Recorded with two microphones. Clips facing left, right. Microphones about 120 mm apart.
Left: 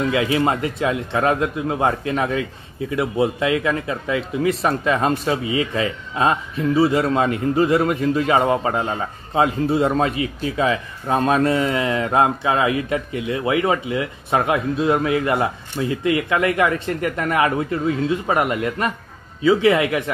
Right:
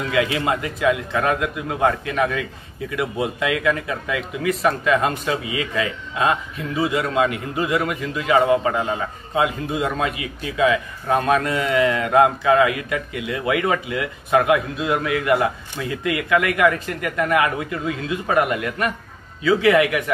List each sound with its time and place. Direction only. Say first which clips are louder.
0.1 s speech: left 2 dB; 30° left (ahead or behind)